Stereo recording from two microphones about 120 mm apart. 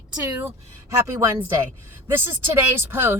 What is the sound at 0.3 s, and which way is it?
Speech, 20° right (ahead or behind).